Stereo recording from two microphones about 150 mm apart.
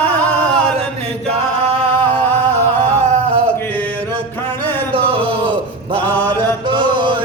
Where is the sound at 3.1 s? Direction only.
40° right (ahead or behind).